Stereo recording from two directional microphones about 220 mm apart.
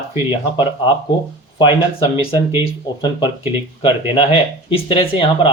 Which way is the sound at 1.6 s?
20° left (ahead or behind).